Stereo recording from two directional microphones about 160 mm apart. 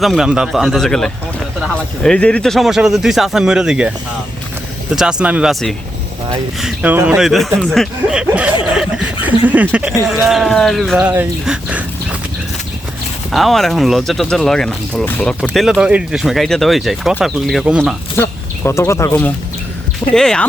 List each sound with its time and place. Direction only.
0.0 s speech: centre (ahead or behind)
4.9 s speech: 5° right (ahead or behind)
7.3 s speech: centre (ahead or behind)
13.3 s speech: centre (ahead or behind)
15.4 s speech: 5° right (ahead or behind)
18.2 s speech: 15° left (ahead or behind)
20.1 s speech: 5° left (ahead or behind)